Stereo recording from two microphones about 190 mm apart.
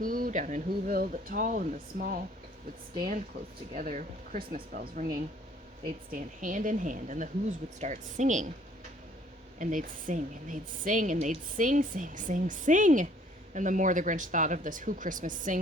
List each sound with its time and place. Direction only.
0.0 s a woman's voice: 45° right (ahead or behind)
9.6 s a woman's voice: 40° right (ahead or behind)